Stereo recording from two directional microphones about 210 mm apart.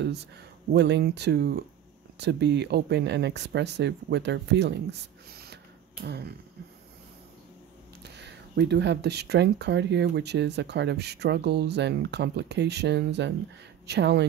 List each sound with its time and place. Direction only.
0.7 s speech: 55° right (ahead or behind)
5.3 s spray: 50° right (ahead or behind)
6.0 s speech: 50° right (ahead or behind)
8.0 s speech: 55° right (ahead or behind)